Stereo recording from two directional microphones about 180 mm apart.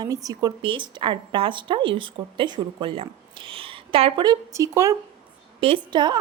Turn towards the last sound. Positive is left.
turn(degrees=-25)  # may be behind; listen again after turning